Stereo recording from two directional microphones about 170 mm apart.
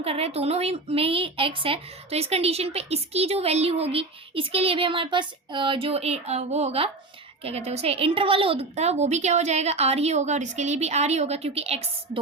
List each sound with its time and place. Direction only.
0.0 s speech: 35° right (ahead or behind)